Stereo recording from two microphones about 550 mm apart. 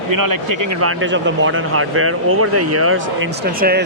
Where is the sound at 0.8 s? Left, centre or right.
Right.